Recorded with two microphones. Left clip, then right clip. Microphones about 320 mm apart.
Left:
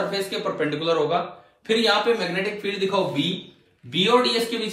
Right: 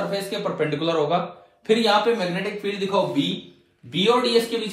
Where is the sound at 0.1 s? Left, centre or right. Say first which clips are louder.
Even; centre.